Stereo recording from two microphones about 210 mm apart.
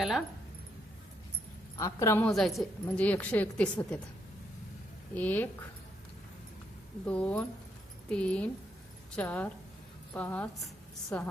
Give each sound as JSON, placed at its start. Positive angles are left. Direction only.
{"t": 1.8, "sound": "a woman's voice", "side_deg": 15}
{"t": 5.1, "sound": "a woman's voice", "side_deg": 10}
{"t": 7.0, "sound": "a woman's voice", "side_deg": 5}